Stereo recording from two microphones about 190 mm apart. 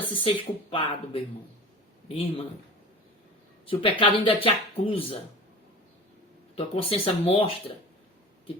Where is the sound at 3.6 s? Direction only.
30° left (ahead or behind).